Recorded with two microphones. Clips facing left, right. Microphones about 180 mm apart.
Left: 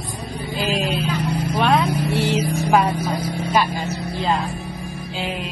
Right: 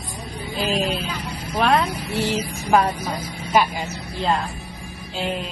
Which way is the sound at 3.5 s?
10° right (ahead or behind).